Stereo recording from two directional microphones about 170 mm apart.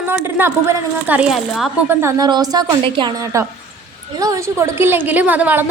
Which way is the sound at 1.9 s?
15° right (ahead or behind).